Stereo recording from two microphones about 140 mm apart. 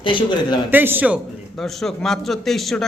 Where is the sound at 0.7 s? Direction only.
15° right (ahead or behind).